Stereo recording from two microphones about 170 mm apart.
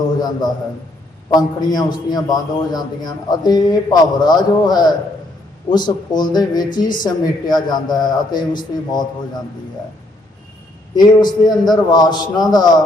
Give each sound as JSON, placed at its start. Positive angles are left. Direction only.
{"t": 0.2, "sound": "a man's voice", "side_deg": 25}
{"t": 10.9, "sound": "a man's voice", "side_deg": 25}